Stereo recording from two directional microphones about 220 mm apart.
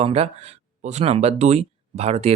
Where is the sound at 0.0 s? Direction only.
30° right (ahead or behind).